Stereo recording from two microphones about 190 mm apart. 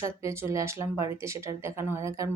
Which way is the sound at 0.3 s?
15° right (ahead or behind).